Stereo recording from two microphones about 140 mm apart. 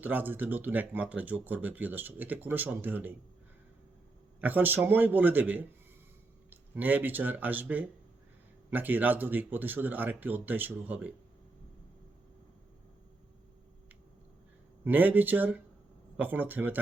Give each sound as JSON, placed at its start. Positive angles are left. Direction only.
{"t": 0.0, "sound": "speech", "side_deg": -15}
{"t": 4.4, "sound": "speech", "side_deg": -10}
{"t": 14.8, "sound": "speech", "side_deg": -10}